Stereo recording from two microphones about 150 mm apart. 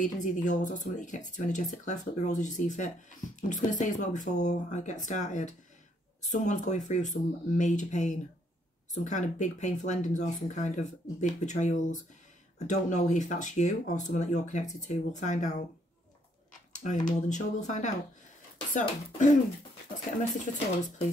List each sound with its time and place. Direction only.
0.0 s speech: 55° left (ahead or behind)
16.7 s speech: 55° left (ahead or behind)